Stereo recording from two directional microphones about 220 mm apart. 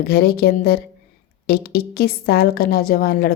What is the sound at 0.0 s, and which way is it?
A woman's voice, 45° left (ahead or behind).